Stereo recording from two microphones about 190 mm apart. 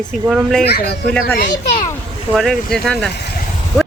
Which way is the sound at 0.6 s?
55° left (ahead or behind).